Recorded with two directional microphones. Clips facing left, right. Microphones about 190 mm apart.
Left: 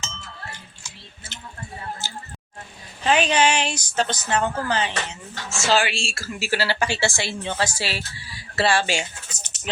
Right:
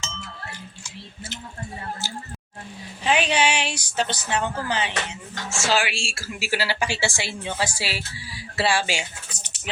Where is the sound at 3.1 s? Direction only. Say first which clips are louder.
Left 2 dB; 40° left (ahead or behind).